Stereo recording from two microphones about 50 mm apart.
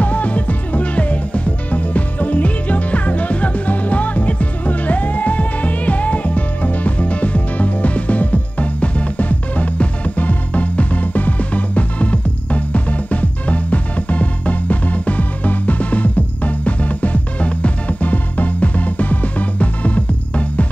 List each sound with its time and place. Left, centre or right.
0.0 s music: left